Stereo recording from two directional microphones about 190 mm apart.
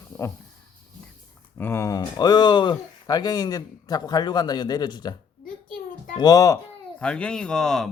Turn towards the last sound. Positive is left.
turn(degrees=0)  # may be behind; listen again after turning